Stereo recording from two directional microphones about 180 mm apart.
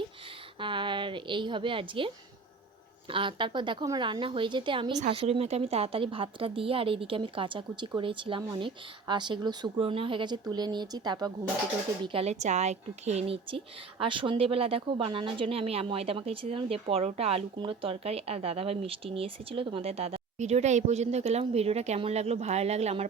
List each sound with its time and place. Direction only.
0.6 s a woman's voice: 25° right (ahead or behind)
12.0 s speech: 35° right (ahead or behind)